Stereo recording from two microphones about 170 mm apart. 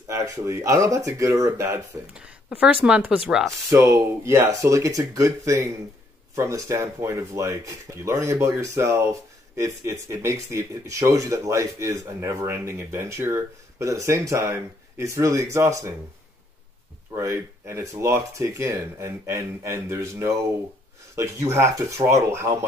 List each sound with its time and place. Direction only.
0.1 s speech: 20° right (ahead or behind)
2.1 s speech: 5° right (ahead or behind)
3.7 s speech: 15° right (ahead or behind)
17.1 s speech: 15° right (ahead or behind)